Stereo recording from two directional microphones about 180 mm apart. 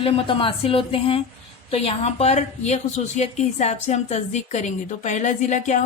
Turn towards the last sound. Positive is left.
turn(degrees=40)  # may be behind; listen again after turning